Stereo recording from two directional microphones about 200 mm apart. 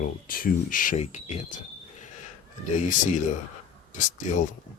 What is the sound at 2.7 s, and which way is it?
Speech, 40° left (ahead or behind).